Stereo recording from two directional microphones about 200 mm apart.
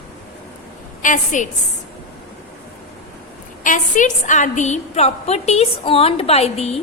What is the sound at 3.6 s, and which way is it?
A woman's voice, 40° left (ahead or behind).